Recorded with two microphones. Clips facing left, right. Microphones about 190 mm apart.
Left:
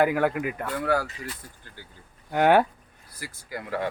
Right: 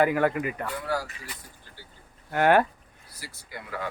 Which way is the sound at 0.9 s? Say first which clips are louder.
Left 5 dB; 55° left (ahead or behind).